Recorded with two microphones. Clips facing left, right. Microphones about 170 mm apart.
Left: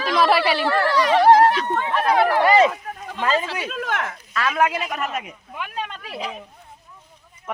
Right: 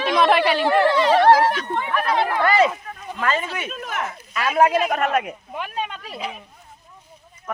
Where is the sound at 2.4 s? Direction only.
20° left (ahead or behind).